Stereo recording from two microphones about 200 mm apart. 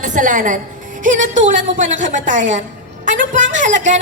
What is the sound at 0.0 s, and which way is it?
A woman's voice, 40° right (ahead or behind).